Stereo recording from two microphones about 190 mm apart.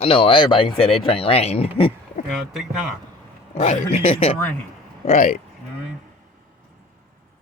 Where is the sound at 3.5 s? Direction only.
35° left (ahead or behind).